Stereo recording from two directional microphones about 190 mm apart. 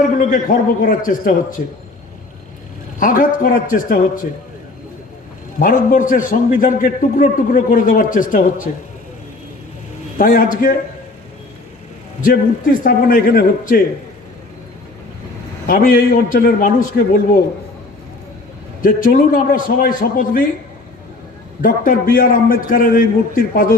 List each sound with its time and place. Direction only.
0.0 s a man's voice: 45° left (ahead or behind)
3.0 s a man's voice: 45° left (ahead or behind)
5.5 s a man's voice: 45° left (ahead or behind)
10.2 s a man's voice: 45° left (ahead or behind)
12.2 s a man's voice: 45° left (ahead or behind)
15.6 s a man's voice: 50° left (ahead or behind)
16.9 s a man's voice: 80° left
18.8 s a man's voice: 45° left (ahead or behind)
21.6 s a man's voice: 45° left (ahead or behind)